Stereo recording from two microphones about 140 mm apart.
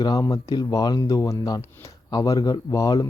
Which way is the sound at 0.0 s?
30° left (ahead or behind).